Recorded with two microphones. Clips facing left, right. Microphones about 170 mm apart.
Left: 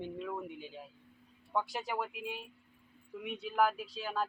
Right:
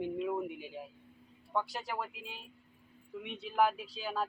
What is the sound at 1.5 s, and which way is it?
Speech, 10° left (ahead or behind).